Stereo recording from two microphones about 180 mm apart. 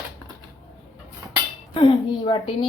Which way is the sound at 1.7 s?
30° left (ahead or behind).